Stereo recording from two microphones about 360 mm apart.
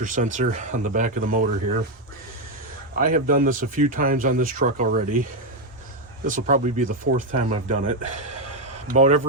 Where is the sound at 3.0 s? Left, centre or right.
Right.